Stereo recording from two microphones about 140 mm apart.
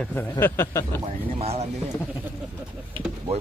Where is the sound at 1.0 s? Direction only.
45° right (ahead or behind).